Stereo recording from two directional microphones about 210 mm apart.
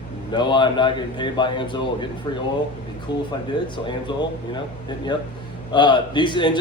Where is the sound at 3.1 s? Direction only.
55° left (ahead or behind).